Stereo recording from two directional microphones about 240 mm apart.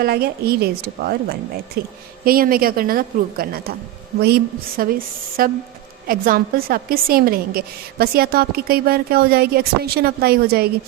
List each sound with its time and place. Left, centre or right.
0.0 s a woman's voice: right